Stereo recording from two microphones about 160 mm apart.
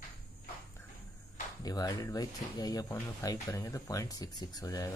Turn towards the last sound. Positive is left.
turn(degrees=25)  # may be behind; listen again after turning